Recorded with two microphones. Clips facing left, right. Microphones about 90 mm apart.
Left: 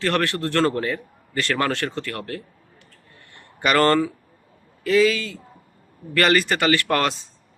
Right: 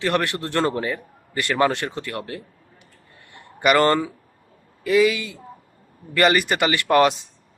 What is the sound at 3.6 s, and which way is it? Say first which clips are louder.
Speech: right 1 dB; 15° right (ahead or behind).